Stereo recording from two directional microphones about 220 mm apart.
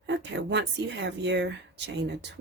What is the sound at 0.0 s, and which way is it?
Speech, 55° right (ahead or behind).